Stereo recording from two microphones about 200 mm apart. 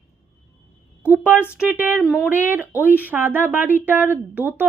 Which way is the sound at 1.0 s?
5° right (ahead or behind).